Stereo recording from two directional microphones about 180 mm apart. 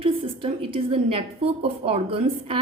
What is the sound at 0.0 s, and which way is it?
A woman's voice, 30° right (ahead or behind).